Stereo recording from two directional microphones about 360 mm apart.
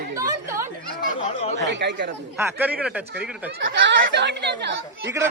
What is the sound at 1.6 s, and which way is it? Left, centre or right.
Speech, right.